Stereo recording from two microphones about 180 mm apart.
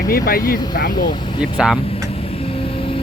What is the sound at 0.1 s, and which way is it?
Speech, 55° left (ahead or behind).